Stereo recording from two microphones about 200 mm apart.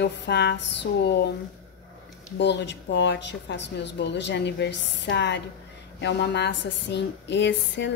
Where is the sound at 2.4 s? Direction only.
60° left (ahead or behind).